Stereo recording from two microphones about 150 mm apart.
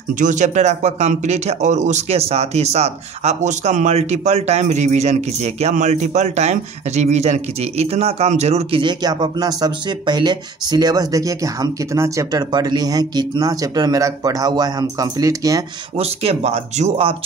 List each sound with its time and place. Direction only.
0.1 s speech: 55° right (ahead or behind)
8.8 s speech: 30° right (ahead or behind)
16.0 s speech: 40° right (ahead or behind)